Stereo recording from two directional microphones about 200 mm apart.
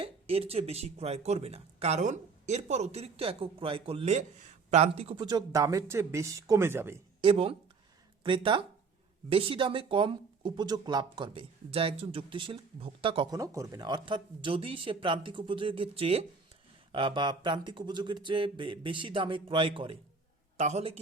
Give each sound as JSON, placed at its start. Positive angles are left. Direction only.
{"t": 0.0, "sound": "speech", "side_deg": -30}
{"t": 7.2, "sound": "speech", "side_deg": -25}